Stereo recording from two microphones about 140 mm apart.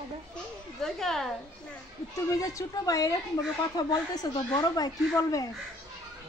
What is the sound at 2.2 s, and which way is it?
Speech, 25° left (ahead or behind).